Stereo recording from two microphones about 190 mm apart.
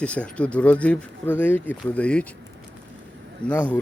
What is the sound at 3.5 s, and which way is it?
Speech, 10° left (ahead or behind).